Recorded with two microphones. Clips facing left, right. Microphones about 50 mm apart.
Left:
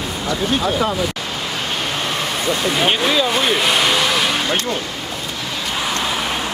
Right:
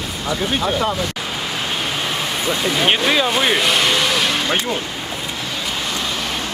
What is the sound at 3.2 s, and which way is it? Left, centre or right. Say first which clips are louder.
Speech: even; centre.